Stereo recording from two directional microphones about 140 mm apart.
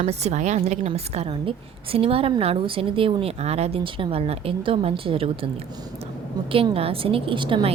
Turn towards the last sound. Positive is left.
turn(degrees=-35)  # may be behind; listen again after turning